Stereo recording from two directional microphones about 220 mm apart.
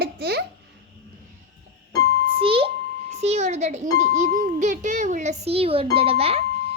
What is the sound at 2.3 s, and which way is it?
A child's voice, 25° right (ahead or behind).